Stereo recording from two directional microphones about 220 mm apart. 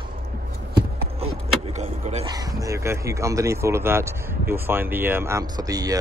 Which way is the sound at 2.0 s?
30° right (ahead or behind).